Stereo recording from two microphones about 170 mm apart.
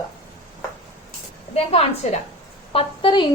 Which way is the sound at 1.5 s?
35° left (ahead or behind).